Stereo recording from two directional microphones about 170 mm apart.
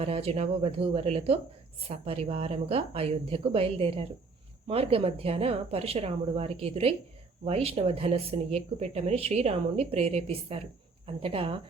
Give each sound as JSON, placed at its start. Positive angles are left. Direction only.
{"t": 0.0, "sound": "speech", "side_deg": -35}